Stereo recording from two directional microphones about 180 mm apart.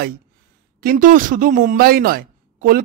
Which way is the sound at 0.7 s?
55° right (ahead or behind).